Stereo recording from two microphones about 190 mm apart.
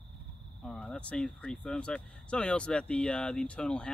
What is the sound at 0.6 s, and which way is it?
Speech, 5° left (ahead or behind).